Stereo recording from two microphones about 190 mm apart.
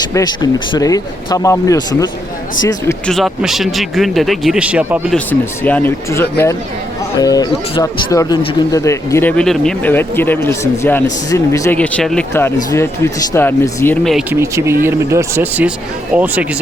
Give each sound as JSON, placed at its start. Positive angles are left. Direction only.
{"t": 0.1, "sound": "speech", "side_deg": 20}
{"t": 3.1, "sound": "speech", "side_deg": 0}
{"t": 5.1, "sound": "speech", "side_deg": 5}
{"t": 14.3, "sound": "speech", "side_deg": -15}